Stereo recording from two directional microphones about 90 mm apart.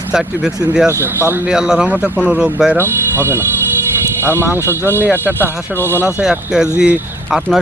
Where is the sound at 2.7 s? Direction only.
25° right (ahead or behind).